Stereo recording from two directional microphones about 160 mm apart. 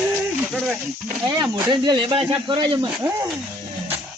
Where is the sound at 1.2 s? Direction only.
20° right (ahead or behind).